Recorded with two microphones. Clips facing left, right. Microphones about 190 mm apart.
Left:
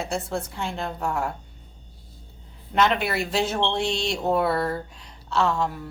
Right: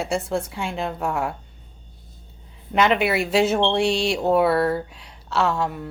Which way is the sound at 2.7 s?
5° right (ahead or behind).